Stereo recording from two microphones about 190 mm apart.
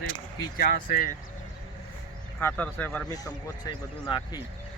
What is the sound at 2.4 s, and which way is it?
A man's voice, 10° left (ahead or behind).